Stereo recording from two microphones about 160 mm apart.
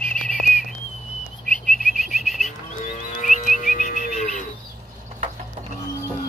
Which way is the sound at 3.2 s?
55° left (ahead or behind).